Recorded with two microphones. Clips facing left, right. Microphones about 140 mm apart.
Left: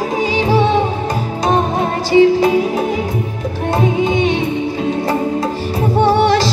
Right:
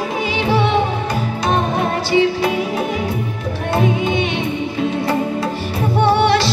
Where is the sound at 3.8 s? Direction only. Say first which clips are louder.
Left 4 dB; 40° left (ahead or behind).